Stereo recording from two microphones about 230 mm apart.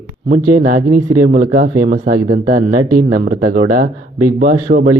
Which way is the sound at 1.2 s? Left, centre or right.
Right.